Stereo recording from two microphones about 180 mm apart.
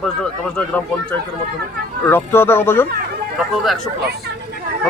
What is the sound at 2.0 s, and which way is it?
Speech, 15° left (ahead or behind).